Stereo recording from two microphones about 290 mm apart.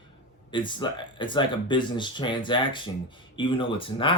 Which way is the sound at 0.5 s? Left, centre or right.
Centre.